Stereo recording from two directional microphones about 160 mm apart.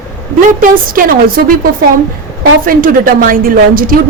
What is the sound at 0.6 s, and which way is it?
A woman's voice, 60° right (ahead or behind).